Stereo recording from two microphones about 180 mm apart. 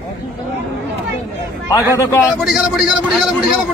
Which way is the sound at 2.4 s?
Centre (ahead or behind).